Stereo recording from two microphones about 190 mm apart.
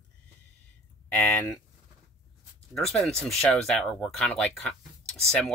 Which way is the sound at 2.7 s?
Centre (ahead or behind).